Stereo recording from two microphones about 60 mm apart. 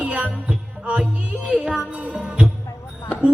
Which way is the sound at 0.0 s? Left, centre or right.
Right.